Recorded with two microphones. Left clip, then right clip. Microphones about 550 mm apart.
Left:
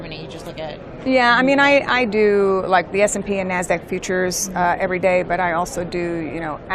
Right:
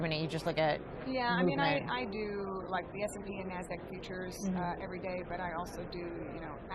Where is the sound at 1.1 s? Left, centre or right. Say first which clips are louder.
Left 18 dB; left.